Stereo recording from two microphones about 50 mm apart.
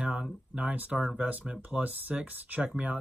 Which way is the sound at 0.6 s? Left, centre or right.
Right.